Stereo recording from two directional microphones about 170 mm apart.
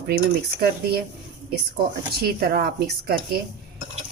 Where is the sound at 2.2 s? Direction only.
70° right (ahead or behind).